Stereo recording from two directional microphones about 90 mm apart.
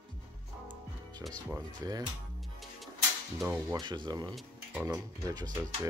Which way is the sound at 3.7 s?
55° right (ahead or behind).